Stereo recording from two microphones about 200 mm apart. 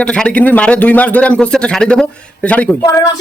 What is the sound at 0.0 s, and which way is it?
A man's voice, 5° left (ahead or behind).